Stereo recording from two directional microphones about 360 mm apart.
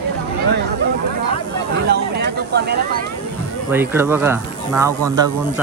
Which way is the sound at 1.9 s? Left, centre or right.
Right.